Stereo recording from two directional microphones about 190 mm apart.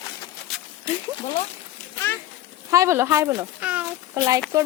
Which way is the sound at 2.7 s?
15° right (ahead or behind).